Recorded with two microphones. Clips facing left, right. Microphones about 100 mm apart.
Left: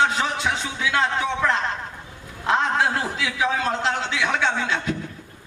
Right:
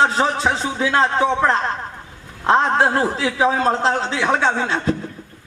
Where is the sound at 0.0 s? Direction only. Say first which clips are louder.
Right 4 dB; 35° right (ahead or behind).